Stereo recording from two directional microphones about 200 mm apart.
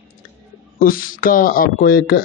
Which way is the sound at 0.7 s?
45° left (ahead or behind).